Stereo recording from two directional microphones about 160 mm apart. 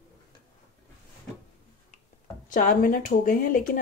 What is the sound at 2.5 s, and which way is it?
Speech, 60° left (ahead or behind).